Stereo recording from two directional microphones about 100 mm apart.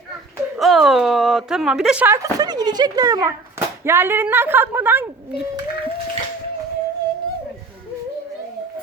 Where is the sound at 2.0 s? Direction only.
35° right (ahead or behind).